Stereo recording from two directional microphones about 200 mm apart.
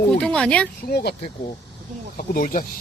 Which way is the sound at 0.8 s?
50° left (ahead or behind).